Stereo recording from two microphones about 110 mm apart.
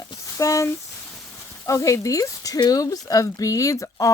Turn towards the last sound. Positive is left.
turn(degrees=30)  # may be behind; listen again after turning